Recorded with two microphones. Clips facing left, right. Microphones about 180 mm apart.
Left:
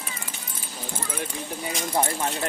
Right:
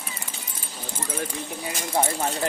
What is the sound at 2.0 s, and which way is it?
Speech, 20° right (ahead or behind).